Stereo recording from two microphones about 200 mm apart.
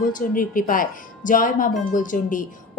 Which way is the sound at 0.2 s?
45° left (ahead or behind).